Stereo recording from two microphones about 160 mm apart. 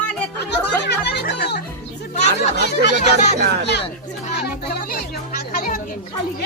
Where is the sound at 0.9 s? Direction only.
90° left.